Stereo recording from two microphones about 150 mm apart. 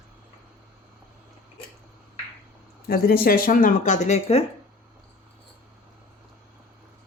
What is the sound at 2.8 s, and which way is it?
Speech, 90° left.